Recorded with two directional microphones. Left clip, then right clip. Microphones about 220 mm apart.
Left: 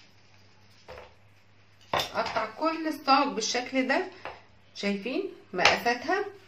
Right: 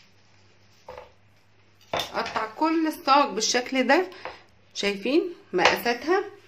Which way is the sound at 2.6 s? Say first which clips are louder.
Right 7 dB; 50° right (ahead or behind).